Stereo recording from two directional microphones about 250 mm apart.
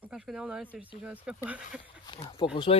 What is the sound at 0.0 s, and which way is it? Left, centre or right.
Speech, centre.